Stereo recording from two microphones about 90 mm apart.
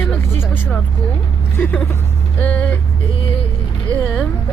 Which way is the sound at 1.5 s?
20° left (ahead or behind).